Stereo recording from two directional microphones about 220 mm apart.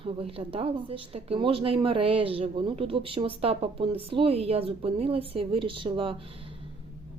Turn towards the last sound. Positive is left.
turn(degrees=-25)  # may be behind; listen again after turning